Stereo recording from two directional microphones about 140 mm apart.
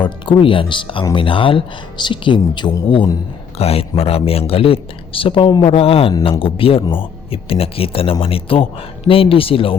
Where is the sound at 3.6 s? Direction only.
45° left (ahead or behind).